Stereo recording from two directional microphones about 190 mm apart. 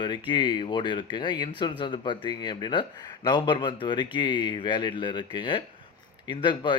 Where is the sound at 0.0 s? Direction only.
25° left (ahead or behind).